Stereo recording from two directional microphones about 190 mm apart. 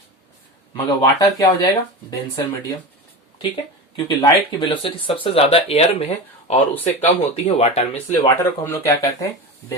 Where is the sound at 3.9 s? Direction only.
25° left (ahead or behind).